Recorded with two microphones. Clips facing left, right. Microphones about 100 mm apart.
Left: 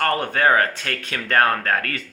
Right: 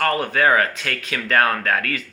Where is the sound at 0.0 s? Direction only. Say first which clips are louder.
Right 1 dB; 30° left (ahead or behind).